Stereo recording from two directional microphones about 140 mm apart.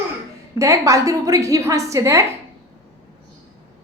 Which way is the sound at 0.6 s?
20° right (ahead or behind).